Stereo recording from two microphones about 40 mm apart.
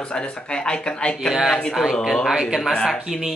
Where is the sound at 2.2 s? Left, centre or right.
Centre.